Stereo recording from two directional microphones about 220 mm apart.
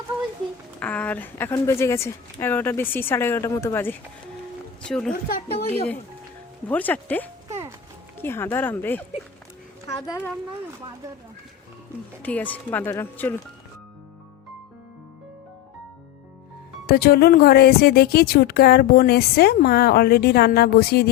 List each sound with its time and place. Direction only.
0.8 s speech: 5° left (ahead or behind)
6.7 s speech: 5° left (ahead or behind)
12.2 s speech: 5° left (ahead or behind)
16.8 s speech: 45° left (ahead or behind)